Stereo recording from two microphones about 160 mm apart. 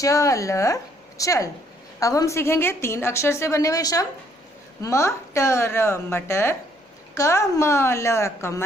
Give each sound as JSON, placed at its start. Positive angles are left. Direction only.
{"t": 0.0, "sound": "a woman's voice", "side_deg": 20}